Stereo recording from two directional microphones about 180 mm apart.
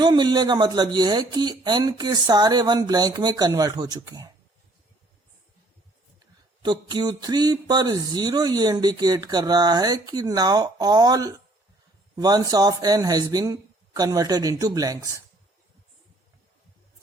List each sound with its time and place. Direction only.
0.0 s speech: 25° right (ahead or behind)
6.6 s speech: 25° right (ahead or behind)